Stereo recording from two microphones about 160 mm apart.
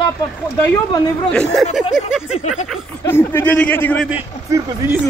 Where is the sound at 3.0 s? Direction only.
15° left (ahead or behind).